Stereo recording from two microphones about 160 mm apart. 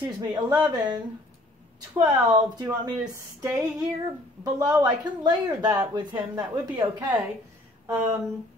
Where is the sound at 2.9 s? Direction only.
20° right (ahead or behind).